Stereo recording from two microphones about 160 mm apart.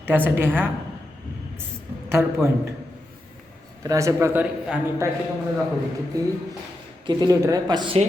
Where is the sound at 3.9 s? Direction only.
20° right (ahead or behind).